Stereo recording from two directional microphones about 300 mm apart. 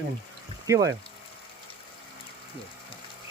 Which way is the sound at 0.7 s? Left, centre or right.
Centre.